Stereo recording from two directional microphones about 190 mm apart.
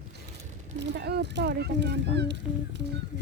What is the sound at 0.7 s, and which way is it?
Speech, 60° right (ahead or behind).